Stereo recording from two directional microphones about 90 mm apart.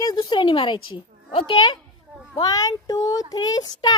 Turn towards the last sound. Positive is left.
turn(degrees=50)  # may be behind; listen again after turning